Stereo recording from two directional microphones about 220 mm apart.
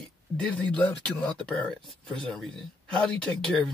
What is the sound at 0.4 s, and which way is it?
Speech, 5° left (ahead or behind).